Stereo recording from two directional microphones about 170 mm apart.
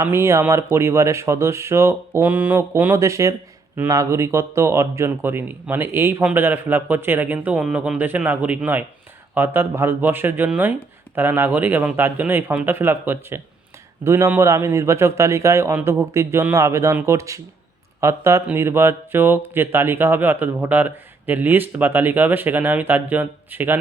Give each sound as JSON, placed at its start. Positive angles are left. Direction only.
{"t": 0.0, "sound": "speech", "side_deg": -15}